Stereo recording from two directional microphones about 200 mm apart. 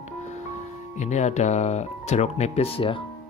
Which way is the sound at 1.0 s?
35° left (ahead or behind).